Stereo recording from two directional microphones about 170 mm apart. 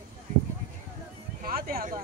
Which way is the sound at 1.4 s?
60° right (ahead or behind).